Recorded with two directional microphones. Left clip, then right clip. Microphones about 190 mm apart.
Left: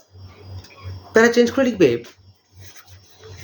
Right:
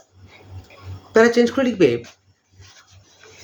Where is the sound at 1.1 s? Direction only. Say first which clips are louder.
Even; centre (ahead or behind).